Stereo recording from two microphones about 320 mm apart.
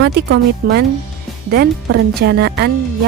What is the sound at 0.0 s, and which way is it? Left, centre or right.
A woman's voice, right.